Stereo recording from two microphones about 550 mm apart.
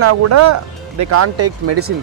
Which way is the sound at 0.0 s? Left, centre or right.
Right.